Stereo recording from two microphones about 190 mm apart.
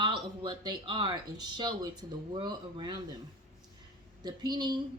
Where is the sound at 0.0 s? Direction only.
25° right (ahead or behind).